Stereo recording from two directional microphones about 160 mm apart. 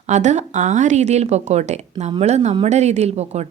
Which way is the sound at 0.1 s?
45° right (ahead or behind).